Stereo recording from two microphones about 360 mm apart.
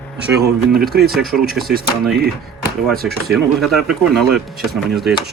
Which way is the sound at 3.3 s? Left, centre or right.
Centre.